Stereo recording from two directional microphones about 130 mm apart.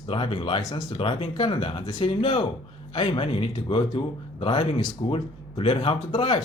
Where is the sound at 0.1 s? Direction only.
40° left (ahead or behind).